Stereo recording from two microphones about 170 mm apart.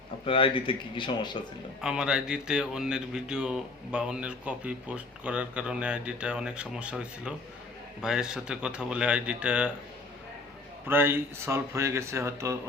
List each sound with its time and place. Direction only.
0.3 s speech: 30° left (ahead or behind)
1.8 s speech: 5° right (ahead or behind)
10.8 s speech: 15° right (ahead or behind)